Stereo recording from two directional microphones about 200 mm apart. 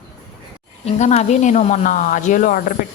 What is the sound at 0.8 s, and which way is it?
Speech, 30° left (ahead or behind).